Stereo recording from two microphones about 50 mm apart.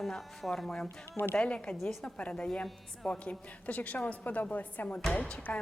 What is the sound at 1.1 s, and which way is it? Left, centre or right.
Speech, left.